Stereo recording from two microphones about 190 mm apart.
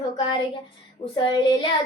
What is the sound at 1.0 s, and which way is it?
Child singing, 35° left (ahead or behind).